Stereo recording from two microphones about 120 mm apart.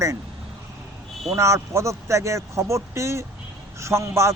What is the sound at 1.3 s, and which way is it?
A man's voice, 25° right (ahead or behind).